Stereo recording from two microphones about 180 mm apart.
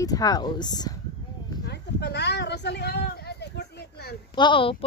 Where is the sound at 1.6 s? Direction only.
65° left (ahead or behind).